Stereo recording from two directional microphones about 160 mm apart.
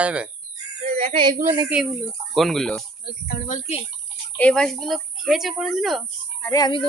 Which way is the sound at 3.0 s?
70° left (ahead or behind).